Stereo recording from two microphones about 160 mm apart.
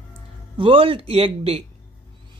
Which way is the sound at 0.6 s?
35° right (ahead or behind).